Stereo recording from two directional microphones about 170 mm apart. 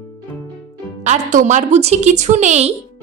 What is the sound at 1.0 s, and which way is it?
A woman's voice, 45° right (ahead or behind).